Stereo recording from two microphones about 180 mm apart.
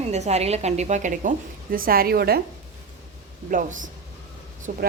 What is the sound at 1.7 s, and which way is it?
Speech, 55° right (ahead or behind).